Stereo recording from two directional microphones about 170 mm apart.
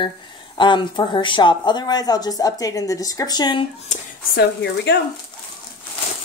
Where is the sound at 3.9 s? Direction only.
40° left (ahead or behind).